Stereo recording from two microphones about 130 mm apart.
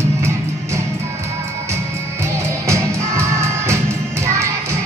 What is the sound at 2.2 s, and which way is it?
Music, 20° right (ahead or behind).